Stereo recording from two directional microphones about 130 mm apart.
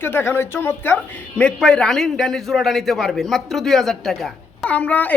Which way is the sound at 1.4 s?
5° left (ahead or behind).